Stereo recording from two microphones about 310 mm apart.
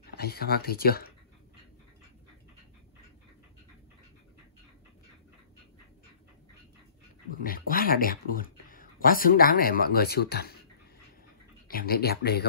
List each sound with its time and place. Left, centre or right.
0.1 s speech: left
7.2 s speech: left
11.6 s speech: left